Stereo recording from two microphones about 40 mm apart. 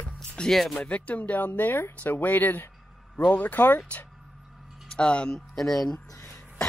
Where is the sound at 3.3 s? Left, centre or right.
Left.